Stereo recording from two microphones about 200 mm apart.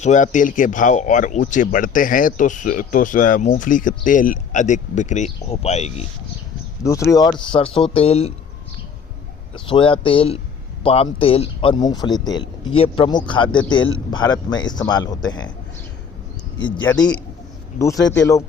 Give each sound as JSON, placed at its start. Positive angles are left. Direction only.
{"t": 0.0, "sound": "speech", "side_deg": 40}
{"t": 6.8, "sound": "speech", "side_deg": 15}
{"t": 9.6, "sound": "speech", "side_deg": 25}
{"t": 16.7, "sound": "speech", "side_deg": 20}